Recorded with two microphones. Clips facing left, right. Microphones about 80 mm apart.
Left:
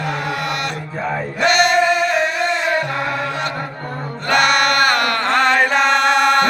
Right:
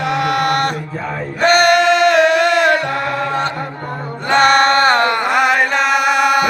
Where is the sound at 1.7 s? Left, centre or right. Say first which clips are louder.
Right 4 dB; right.